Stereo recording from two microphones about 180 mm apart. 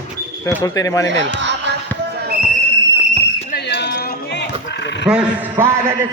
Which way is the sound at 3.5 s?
65° left (ahead or behind).